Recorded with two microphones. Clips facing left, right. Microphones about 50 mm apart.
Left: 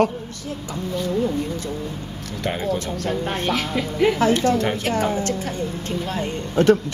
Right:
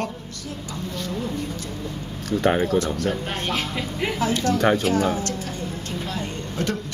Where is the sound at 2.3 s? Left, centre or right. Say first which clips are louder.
Right 4 dB; right.